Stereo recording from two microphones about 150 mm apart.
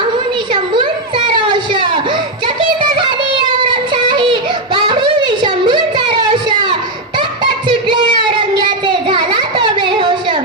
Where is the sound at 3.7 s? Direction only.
30° right (ahead or behind).